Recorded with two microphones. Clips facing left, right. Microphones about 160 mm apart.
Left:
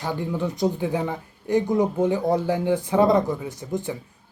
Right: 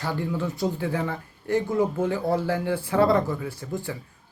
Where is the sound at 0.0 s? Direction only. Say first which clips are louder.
Left 1 dB; 15° left (ahead or behind).